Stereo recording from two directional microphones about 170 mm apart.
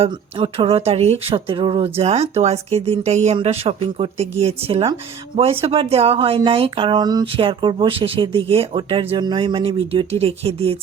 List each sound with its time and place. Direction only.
0.0 s speech: 35° right (ahead or behind)